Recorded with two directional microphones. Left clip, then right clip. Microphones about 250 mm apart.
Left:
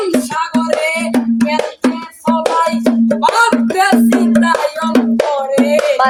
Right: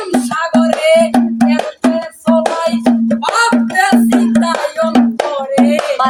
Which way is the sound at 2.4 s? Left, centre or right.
Centre.